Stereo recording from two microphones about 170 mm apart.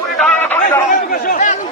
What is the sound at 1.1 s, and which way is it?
Speech, 55° left (ahead or behind).